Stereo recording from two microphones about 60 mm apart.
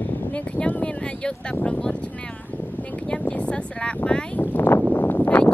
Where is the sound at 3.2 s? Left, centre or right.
Centre.